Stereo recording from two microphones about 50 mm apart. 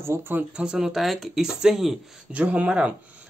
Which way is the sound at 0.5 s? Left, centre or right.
Right.